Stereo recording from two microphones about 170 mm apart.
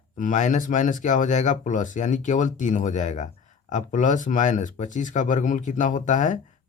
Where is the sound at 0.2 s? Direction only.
50° left (ahead or behind).